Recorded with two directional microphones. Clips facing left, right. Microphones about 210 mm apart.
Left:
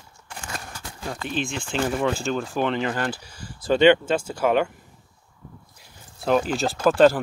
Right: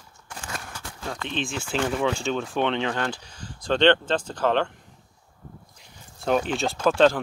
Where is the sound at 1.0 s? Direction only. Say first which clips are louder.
Left 2 dB; 5° left (ahead or behind).